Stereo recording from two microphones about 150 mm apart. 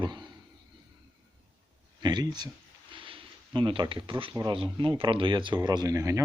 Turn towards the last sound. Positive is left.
turn(degrees=-20)  # may be behind; listen again after turning